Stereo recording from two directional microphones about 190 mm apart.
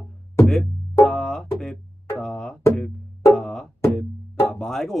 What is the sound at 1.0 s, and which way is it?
Music, centre (ahead or behind).